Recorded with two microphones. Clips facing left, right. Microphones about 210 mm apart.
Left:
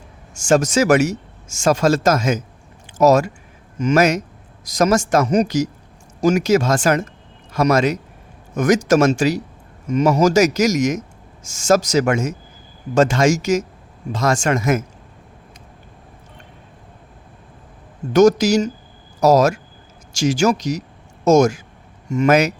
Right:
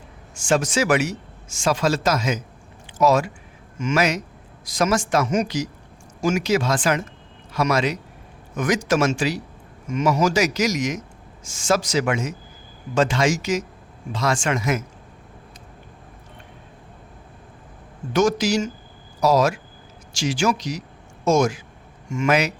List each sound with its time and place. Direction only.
0.3 s a man's voice: 45° left (ahead or behind)
18.1 s a man's voice: 40° left (ahead or behind)